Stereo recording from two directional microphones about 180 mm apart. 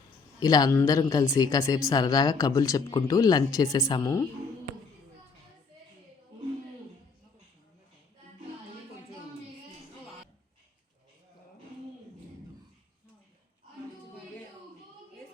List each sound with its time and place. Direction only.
0.3 s speech: 20° left (ahead or behind)